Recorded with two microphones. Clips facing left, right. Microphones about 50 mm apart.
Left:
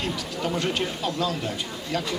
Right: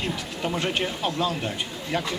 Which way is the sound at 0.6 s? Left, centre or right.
Right.